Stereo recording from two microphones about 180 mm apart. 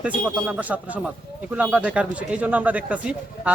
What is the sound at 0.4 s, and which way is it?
Speech, 10° right (ahead or behind).